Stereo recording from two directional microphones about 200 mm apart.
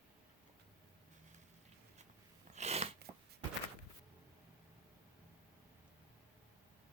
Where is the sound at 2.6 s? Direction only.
30° right (ahead or behind).